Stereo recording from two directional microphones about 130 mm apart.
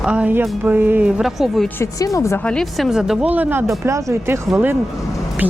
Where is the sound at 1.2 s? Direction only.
5° right (ahead or behind).